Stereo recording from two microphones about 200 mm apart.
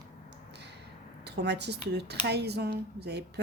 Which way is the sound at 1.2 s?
55° right (ahead or behind).